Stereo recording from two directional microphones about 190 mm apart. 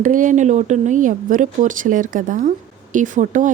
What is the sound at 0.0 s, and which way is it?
Speech, 45° right (ahead or behind).